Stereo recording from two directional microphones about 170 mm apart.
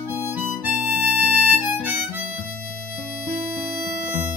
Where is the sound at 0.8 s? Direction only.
10° right (ahead or behind).